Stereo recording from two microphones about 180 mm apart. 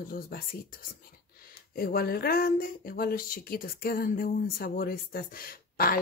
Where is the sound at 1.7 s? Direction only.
55° left (ahead or behind).